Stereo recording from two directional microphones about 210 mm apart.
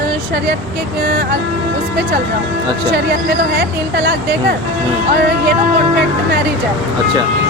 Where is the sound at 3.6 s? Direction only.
55° right (ahead or behind).